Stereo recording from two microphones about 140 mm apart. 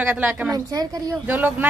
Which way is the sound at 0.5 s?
25° right (ahead or behind).